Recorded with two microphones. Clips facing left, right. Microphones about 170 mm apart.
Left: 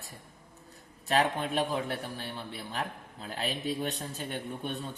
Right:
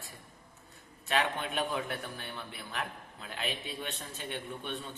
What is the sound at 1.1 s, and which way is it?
A man's voice, 35° left (ahead or behind).